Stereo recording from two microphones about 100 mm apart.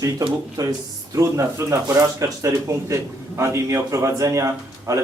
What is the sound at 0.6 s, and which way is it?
A man's voice, 40° right (ahead or behind).